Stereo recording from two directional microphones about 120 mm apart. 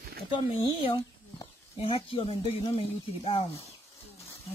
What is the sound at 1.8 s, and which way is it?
Speech, 45° left (ahead or behind).